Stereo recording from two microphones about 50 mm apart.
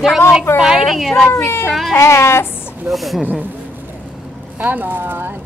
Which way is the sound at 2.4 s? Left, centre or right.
Left.